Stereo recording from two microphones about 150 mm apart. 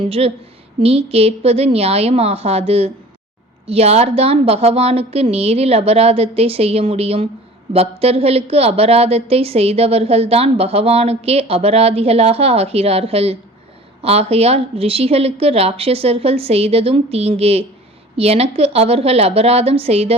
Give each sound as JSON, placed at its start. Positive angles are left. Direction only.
{"t": 0.0, "sound": "a woman's voice", "side_deg": -40}